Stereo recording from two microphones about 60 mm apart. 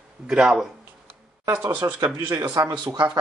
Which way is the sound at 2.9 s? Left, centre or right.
Right.